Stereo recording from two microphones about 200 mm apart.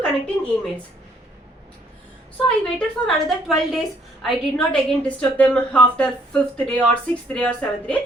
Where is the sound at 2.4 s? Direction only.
5° left (ahead or behind).